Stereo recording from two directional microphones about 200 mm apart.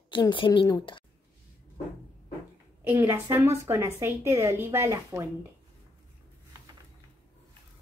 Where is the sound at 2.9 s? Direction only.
10° right (ahead or behind).